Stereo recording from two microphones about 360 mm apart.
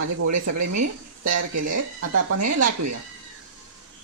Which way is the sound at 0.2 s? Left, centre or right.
Right.